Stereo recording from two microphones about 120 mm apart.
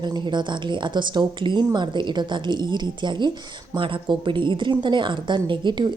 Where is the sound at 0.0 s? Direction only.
40° right (ahead or behind).